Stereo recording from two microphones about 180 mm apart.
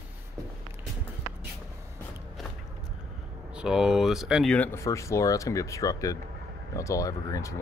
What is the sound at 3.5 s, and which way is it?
Speech, 5° right (ahead or behind).